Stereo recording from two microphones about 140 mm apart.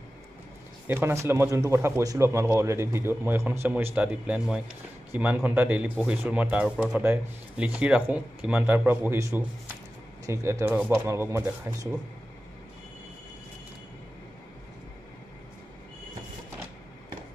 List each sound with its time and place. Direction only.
0.8 s speech: 15° right (ahead or behind)